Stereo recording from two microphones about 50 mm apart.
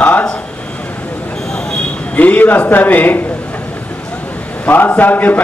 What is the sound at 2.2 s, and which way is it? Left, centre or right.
A man's voice, left.